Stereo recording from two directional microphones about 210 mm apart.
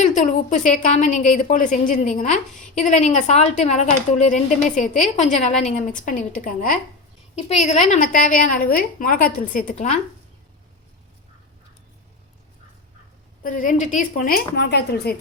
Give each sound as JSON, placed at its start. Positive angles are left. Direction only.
{"t": 0.0, "sound": "a woman's voice", "side_deg": 35}
{"t": 13.4, "sound": "a woman's voice", "side_deg": 40}